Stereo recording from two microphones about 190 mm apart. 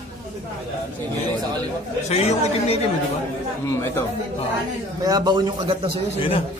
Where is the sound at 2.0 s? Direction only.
35° left (ahead or behind).